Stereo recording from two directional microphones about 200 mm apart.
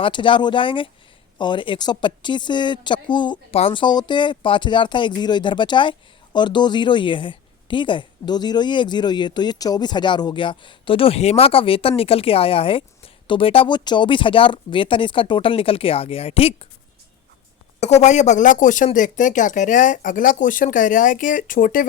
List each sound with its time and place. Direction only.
0.0 s a woman's voice: 25° left (ahead or behind)
17.7 s speech: 35° left (ahead or behind)